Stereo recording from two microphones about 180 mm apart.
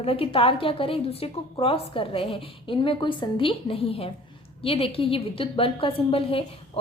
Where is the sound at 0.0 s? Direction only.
30° left (ahead or behind).